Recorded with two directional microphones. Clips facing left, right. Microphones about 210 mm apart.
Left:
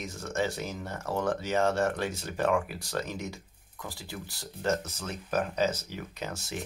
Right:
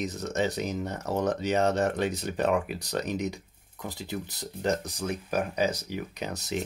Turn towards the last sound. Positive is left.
turn(degrees=-20)  # may be behind; listen again after turning